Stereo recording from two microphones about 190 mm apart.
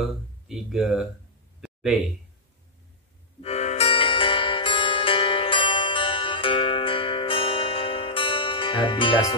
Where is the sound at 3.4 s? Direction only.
35° left (ahead or behind).